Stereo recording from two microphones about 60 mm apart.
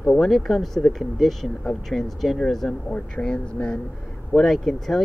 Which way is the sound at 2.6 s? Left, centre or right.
Centre.